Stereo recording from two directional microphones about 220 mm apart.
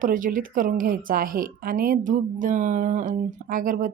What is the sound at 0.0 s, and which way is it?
A woman's voice, 40° right (ahead or behind).